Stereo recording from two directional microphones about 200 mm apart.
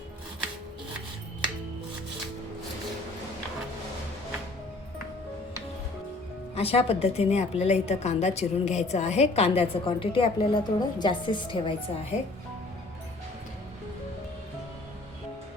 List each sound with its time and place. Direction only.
6.6 s a woman's voice: 30° left (ahead or behind)